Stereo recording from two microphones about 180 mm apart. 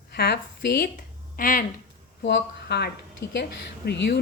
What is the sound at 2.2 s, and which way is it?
A woman's voice, 70° left (ahead or behind).